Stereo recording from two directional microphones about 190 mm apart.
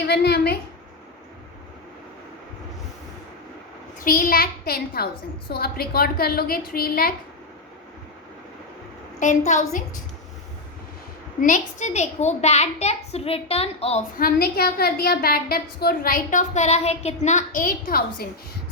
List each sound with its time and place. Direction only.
0.0 s a woman's voice: 60° left (ahead or behind)
4.0 s a woman's voice: 50° left (ahead or behind)
9.2 s a child's voice: 40° left (ahead or behind)
11.4 s a child's voice: 40° left (ahead or behind)
14.2 s a woman's voice: 50° left (ahead or behind)